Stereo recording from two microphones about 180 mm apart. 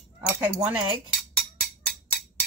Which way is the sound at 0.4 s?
10° right (ahead or behind).